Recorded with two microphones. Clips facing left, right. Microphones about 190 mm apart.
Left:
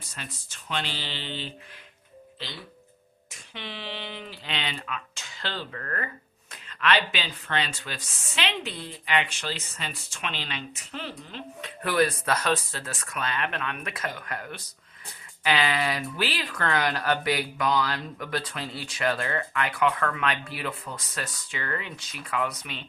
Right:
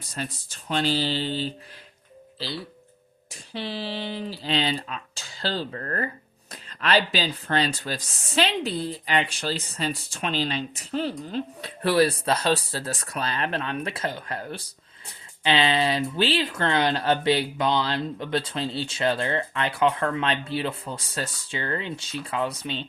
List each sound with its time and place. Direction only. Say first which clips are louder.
0.1 s speech: right 10 dB; 35° right (ahead or behind)